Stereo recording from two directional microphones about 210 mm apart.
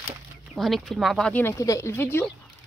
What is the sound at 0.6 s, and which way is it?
Speech, centre (ahead or behind).